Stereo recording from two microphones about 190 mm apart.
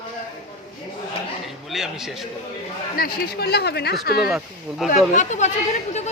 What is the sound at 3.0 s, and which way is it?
Speech, 55° left (ahead or behind).